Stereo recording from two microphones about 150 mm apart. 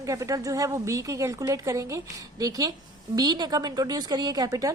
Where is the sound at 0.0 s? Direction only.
20° right (ahead or behind).